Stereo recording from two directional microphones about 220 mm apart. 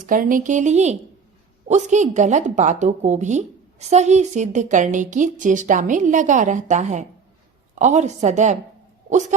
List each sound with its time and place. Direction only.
0.0 s a woman's voice: 40° right (ahead or behind)